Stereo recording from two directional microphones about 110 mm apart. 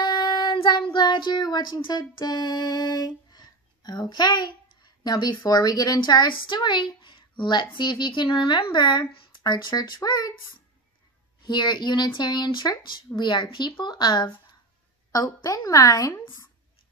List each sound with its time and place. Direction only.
0.0 s child singing: 40° left (ahead or behind)
5.0 s speech: 40° left (ahead or behind)
11.4 s speech: 45° left (ahead or behind)